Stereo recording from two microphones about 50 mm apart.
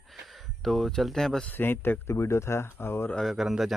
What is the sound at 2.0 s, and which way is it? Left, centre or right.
Speech, left.